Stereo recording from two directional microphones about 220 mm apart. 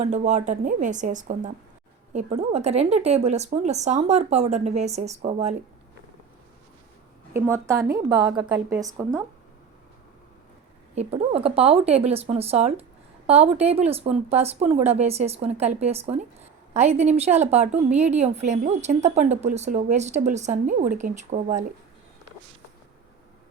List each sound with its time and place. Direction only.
0.0 s a woman's voice: 30° right (ahead or behind)
7.3 s a woman's voice: 10° right (ahead or behind)
10.9 s a woman's voice: 25° right (ahead or behind)